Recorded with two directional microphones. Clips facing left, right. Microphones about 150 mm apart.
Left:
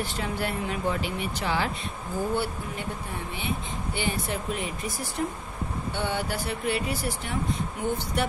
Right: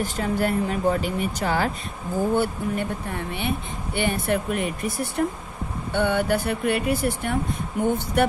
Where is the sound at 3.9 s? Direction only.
60° right (ahead or behind).